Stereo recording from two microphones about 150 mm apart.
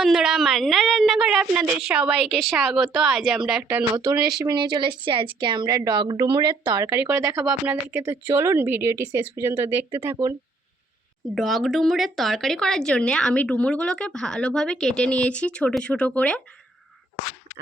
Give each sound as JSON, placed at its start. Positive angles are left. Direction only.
{"t": 0.0, "sound": "a woman's voice", "side_deg": -5}
{"t": 3.9, "sound": "a woman's voice", "side_deg": -25}
{"t": 7.4, "sound": "a woman's voice", "side_deg": -10}
{"t": 11.3, "sound": "speech", "side_deg": 0}